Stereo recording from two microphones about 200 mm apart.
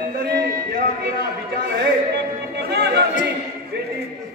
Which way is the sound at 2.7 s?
55° right (ahead or behind).